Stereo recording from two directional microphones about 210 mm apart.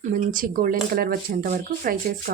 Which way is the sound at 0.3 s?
40° right (ahead or behind).